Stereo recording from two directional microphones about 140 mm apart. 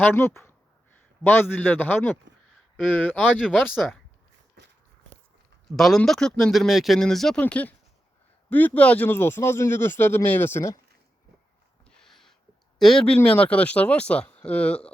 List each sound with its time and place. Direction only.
0.0 s speech: 15° left (ahead or behind)
3.6 s speech: centre (ahead or behind)
5.7 s speech: centre (ahead or behind)
11.9 s a sound: 5° left (ahead or behind)
12.8 s speech: 5° left (ahead or behind)